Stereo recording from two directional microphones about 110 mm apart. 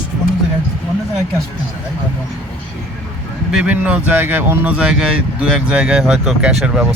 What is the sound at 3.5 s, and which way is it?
Speech, 10° right (ahead or behind).